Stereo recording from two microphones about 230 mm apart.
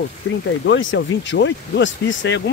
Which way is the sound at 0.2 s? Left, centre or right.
Left.